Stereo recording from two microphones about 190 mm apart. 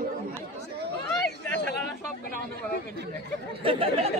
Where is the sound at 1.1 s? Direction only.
5° left (ahead or behind).